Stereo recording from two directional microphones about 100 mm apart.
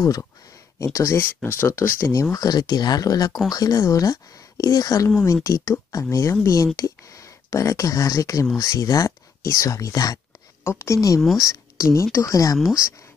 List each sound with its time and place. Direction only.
0.0 s speech: 35° left (ahead or behind)
2.3 s speech: 40° left (ahead or behind)